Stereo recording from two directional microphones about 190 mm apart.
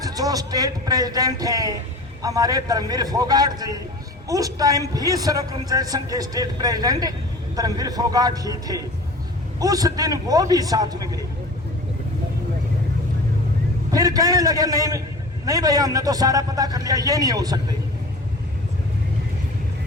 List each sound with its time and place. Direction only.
0.0 s a man's voice: 20° right (ahead or behind)
13.9 s a man's voice: 20° right (ahead or behind)